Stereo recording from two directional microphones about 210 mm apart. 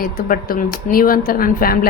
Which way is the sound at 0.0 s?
45° left (ahead or behind).